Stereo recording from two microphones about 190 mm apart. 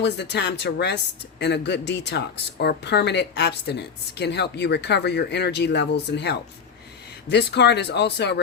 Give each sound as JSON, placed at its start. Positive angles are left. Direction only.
{"t": 0.0, "sound": "speech", "side_deg": 65}